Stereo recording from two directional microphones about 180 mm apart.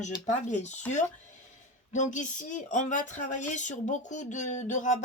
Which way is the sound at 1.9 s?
45° left (ahead or behind).